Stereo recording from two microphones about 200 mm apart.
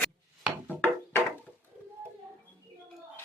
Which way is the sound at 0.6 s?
10° left (ahead or behind).